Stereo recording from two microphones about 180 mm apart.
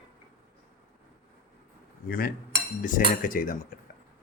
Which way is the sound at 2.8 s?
45° left (ahead or behind).